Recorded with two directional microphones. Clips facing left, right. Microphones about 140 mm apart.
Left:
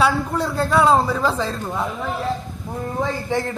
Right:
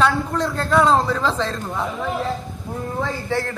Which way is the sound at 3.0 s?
15° left (ahead or behind).